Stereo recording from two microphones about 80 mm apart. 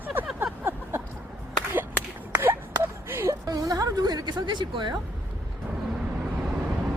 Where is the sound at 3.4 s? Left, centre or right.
Right.